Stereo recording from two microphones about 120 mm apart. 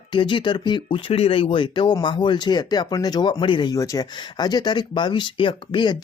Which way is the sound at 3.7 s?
30° left (ahead or behind).